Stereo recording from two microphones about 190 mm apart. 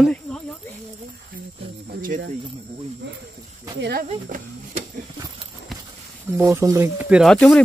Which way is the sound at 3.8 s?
55° right (ahead or behind).